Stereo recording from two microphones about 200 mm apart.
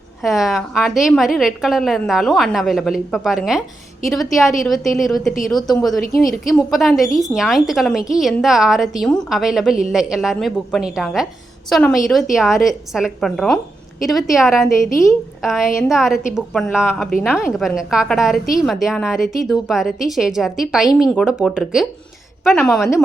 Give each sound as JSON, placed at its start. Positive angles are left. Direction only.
{"t": 0.2, "sound": "a woman's voice", "side_deg": 0}
{"t": 6.0, "sound": "a woman's voice", "side_deg": 45}
{"t": 6.7, "sound": "a woman's voice", "side_deg": 0}